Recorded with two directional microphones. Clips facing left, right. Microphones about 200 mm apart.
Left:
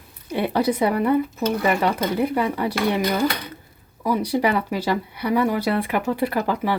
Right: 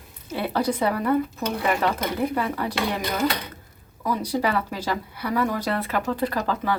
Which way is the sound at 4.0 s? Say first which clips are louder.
Left 4 dB; 10° left (ahead or behind).